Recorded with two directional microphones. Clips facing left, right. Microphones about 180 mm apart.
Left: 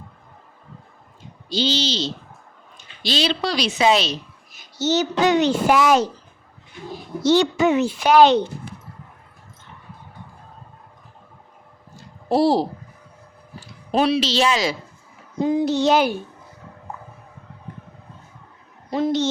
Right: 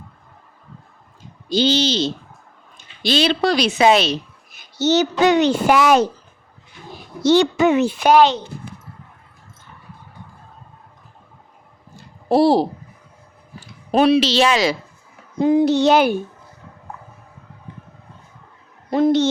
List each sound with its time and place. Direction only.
1.5 s speech: 55° right (ahead or behind)
7.2 s a child's voice: 65° right (ahead or behind)
12.3 s a child's voice: 60° right (ahead or behind)
13.9 s a child's voice: 55° right (ahead or behind)
18.9 s speech: 55° right (ahead or behind)